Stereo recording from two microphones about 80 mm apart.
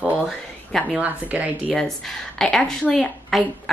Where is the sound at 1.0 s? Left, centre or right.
Centre.